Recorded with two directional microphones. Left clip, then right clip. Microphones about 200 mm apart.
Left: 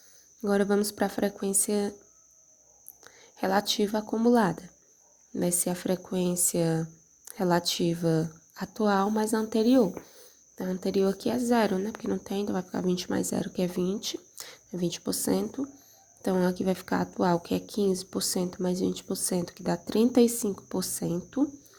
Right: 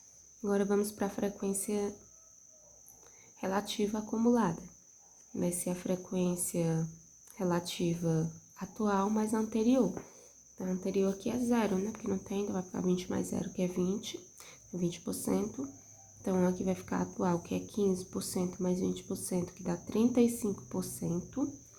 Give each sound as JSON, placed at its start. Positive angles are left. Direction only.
{"t": 0.4, "sound": "a woman's voice", "side_deg": 35}
{"t": 3.4, "sound": "a woman's voice", "side_deg": 35}